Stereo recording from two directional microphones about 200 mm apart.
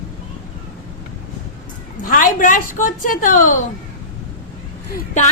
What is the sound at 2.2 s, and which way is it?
A woman's voice, 40° left (ahead or behind).